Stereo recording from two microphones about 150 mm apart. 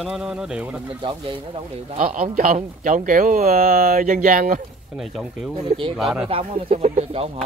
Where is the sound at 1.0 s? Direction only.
35° right (ahead or behind).